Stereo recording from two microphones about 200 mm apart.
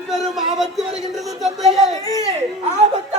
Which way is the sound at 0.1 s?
Centre (ahead or behind).